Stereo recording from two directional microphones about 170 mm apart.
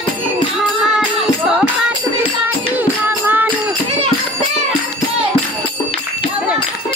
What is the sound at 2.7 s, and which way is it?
Music, 10° right (ahead or behind).